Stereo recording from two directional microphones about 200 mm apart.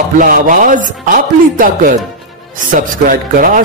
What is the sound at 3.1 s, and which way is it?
Speech, 40° right (ahead or behind).